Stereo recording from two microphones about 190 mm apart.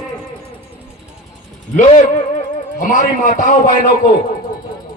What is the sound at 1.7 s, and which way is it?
A man's voice, 40° left (ahead or behind).